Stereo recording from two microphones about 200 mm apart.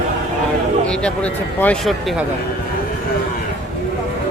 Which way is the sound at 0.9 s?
5° left (ahead or behind).